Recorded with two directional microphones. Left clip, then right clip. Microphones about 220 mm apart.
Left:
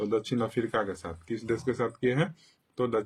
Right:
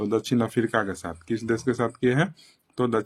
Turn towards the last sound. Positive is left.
turn(degrees=-40)  # may be behind; listen again after turning